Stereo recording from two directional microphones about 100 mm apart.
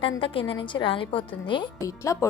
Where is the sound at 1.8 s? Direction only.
35° left (ahead or behind).